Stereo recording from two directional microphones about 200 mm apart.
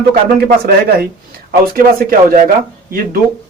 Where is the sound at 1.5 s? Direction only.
45° right (ahead or behind).